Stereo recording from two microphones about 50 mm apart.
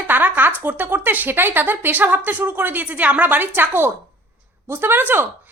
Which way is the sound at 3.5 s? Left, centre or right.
Right.